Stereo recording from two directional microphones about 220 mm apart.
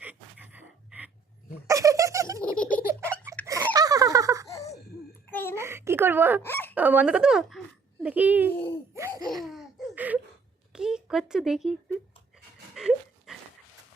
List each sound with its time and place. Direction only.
0.0 s pant: 10° right (ahead or behind)
1.6 s giggle: 15° right (ahead or behind)
2.4 s baby laughter: 5° left (ahead or behind)
3.0 s a sound: 10° right (ahead or behind)
3.4 s laughter: 15° right (ahead or behind)
4.4 s laughter: 15° left (ahead or behind)
5.3 s a sound: 10° left (ahead or behind)
5.5 s a sound: 10° right (ahead or behind)
6.4 s fowl: 10° left (ahead or behind)
6.7 s a child's voice: 5° right (ahead or behind)
9.0 s laughter: 15° right (ahead or behind)
9.4 s laughter: centre (ahead or behind)
10.7 s a sound: 5° right (ahead or behind)
12.7 s dog: centre (ahead or behind)